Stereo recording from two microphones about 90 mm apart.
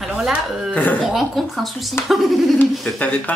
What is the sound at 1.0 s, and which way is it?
A woman's voice, centre (ahead or behind).